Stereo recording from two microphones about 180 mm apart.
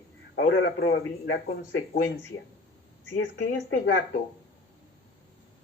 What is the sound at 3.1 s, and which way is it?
Speech, 90° left.